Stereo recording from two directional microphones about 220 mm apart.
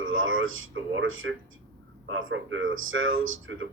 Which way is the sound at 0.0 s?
65° right (ahead or behind).